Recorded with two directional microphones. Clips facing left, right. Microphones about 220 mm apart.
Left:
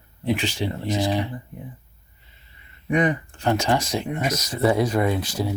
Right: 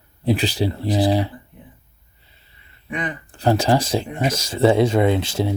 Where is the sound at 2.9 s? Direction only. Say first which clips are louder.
Left 7 dB; 45° left (ahead or behind).